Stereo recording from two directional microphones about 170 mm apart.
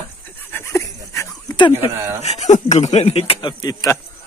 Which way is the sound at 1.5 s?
30° left (ahead or behind).